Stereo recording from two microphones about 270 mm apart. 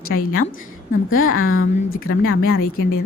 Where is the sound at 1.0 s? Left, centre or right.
Left.